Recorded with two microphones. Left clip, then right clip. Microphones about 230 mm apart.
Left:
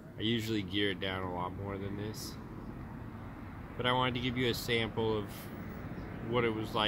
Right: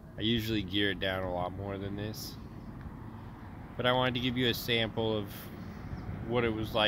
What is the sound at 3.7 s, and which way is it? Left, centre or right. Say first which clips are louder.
Speech: right 3 dB; right.